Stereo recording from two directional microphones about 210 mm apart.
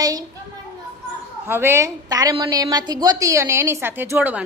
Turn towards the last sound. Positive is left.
turn(degrees=-10)  # may be behind; listen again after turning